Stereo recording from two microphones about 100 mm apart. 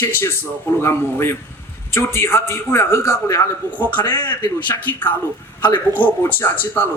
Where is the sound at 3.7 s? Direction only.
15° left (ahead or behind).